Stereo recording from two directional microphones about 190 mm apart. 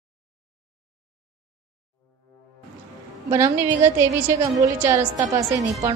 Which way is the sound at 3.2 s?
15° right (ahead or behind).